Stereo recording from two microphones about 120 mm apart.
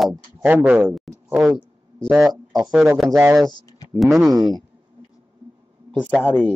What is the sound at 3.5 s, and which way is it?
Speech, 30° left (ahead or behind).